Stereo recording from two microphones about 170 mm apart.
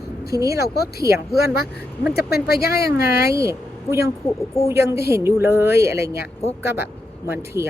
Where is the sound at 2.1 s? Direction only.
70° left (ahead or behind).